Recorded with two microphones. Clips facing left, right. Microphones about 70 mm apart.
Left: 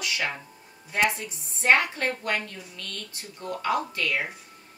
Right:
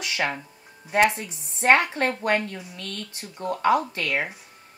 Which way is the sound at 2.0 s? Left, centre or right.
Right.